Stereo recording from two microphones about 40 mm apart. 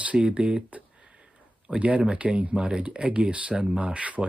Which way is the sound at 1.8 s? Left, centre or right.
Right.